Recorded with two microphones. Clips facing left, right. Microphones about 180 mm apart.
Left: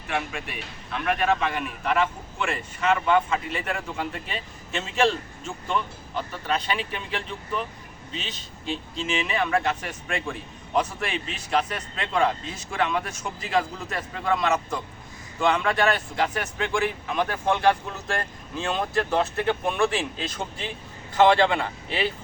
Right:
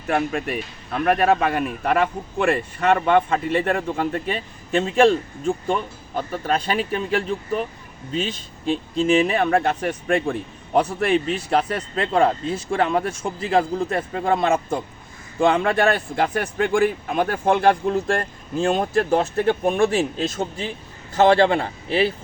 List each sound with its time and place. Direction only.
0.1 s a man's voice: 45° right (ahead or behind)
15.4 s speech: 50° right (ahead or behind)